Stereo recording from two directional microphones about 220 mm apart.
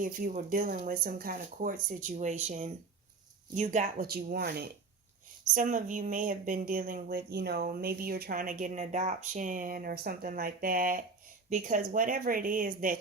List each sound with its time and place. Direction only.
0.0 s speech: 40° right (ahead or behind)
5.5 s speech: 35° right (ahead or behind)